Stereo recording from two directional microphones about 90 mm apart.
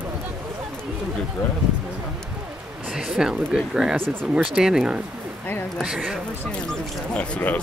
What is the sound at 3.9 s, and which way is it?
Speech, 25° right (ahead or behind).